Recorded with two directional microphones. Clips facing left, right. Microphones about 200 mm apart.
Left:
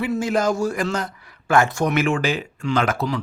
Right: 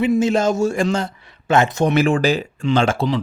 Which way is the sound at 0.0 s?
20° right (ahead or behind).